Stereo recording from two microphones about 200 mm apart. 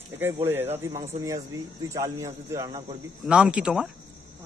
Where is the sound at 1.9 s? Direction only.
15° right (ahead or behind).